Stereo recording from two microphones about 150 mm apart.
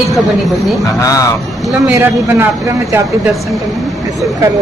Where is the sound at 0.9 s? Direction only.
20° left (ahead or behind).